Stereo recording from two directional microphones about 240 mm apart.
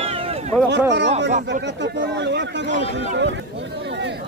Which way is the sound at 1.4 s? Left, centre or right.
Right.